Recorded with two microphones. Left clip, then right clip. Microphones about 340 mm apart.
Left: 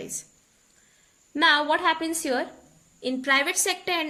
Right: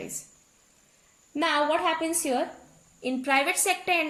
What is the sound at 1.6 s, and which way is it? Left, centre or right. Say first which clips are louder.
Speech: left 2 dB; left.